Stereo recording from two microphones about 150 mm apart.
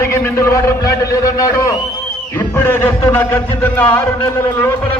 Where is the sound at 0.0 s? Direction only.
15° left (ahead or behind).